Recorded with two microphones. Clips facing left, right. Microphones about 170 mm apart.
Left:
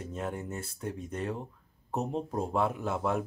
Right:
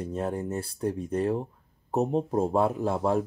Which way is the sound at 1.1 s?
35° right (ahead or behind).